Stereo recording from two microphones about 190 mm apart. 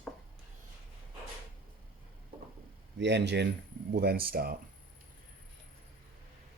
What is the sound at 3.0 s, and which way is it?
Speech, 65° right (ahead or behind).